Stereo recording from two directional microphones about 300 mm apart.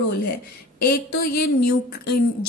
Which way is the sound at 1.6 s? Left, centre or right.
Left.